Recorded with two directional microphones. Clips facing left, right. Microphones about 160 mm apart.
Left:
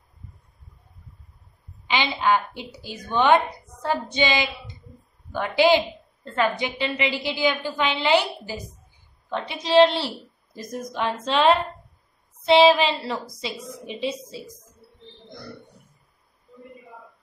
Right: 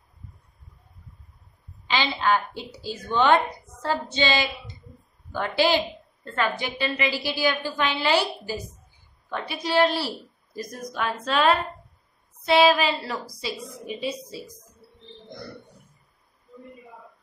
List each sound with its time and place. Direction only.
1.9 s a woman's voice: 15° left (ahead or behind)